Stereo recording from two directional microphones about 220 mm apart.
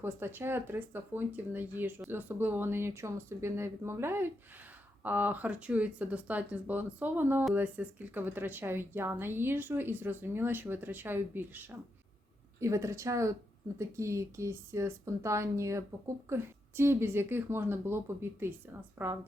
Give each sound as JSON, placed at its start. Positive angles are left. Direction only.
{"t": 0.0, "sound": "speech", "side_deg": -10}